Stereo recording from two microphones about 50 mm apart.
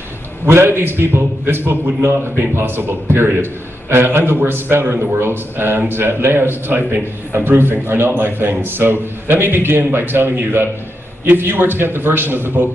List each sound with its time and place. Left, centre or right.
0.5 s speech: right
2.6 s speech: right